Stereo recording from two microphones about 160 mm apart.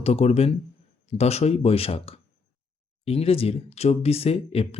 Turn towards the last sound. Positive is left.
turn(degrees=40)  # may be behind; listen again after turning